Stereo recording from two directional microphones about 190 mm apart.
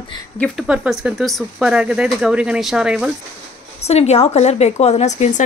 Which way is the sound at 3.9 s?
35° left (ahead or behind).